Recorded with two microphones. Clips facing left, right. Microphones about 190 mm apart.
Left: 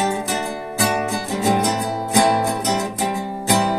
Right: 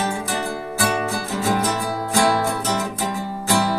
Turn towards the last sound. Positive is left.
turn(degrees=20)  # may be behind; listen again after turning